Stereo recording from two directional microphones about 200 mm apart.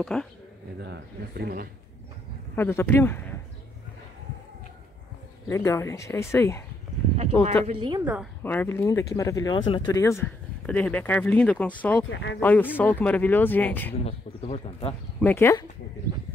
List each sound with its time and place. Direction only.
0.0 s speech: 5° left (ahead or behind)
0.8 s speech: 55° right (ahead or behind)
2.5 s speech: 10° left (ahead or behind)
5.5 s speech: 15° left (ahead or behind)
7.6 s a woman's voice: 25° right (ahead or behind)
8.0 s a woman's voice: 10° right (ahead or behind)
8.5 s speech: 10° left (ahead or behind)
10.2 s speech: 10° left (ahead or behind)
12.1 s speech: 65° left (ahead or behind)
12.4 s speech: 10° left (ahead or behind)
13.9 s speech: 30° left (ahead or behind)
15.1 s speech: 10° left (ahead or behind)